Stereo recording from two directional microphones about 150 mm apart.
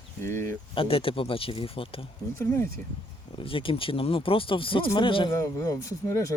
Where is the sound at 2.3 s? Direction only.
15° left (ahead or behind).